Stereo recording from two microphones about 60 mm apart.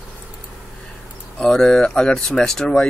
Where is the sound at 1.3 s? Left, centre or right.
Centre.